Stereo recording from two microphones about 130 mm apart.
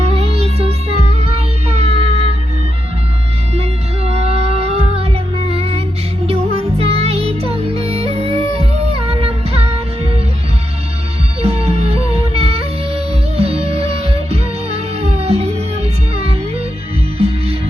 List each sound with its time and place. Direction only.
0.0 s music: 50° right (ahead or behind)
3.5 s music: 50° right (ahead or behind)
11.4 s music: 50° right (ahead or behind)